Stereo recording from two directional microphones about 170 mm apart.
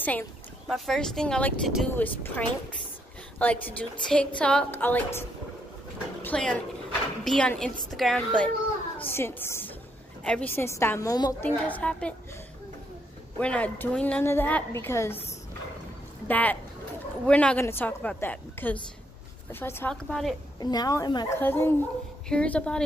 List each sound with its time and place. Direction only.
0.0 s a woman's voice: 10° left (ahead or behind)
6.2 s a woman's voice: 5° left (ahead or behind)
11.6 s a woman's voice: 5° left (ahead or behind)
13.4 s a woman's voice: 5° left (ahead or behind)
16.3 s a woman's voice: 10° left (ahead or behind)
20.5 s a woman's voice: 20° left (ahead or behind)
21.4 s a woman's voice: 15° left (ahead or behind)